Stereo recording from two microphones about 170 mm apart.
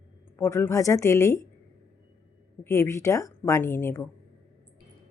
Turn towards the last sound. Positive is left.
turn(degrees=15)  # may be behind; listen again after turning